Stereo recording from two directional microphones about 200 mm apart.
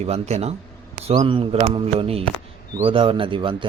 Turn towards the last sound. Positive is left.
turn(degrees=-25)  # may be behind; listen again after turning